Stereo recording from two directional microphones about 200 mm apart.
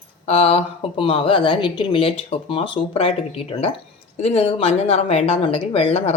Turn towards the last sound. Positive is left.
turn(degrees=30)  # may be behind; listen again after turning